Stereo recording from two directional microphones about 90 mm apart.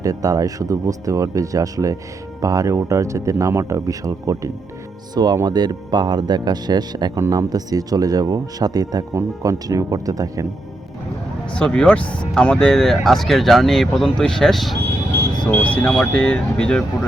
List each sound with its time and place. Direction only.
0.0 s speech: 40° right (ahead or behind)
5.1 s speech: 50° right (ahead or behind)
11.5 s speech: 10° left (ahead or behind)
15.1 s speech: 25° left (ahead or behind)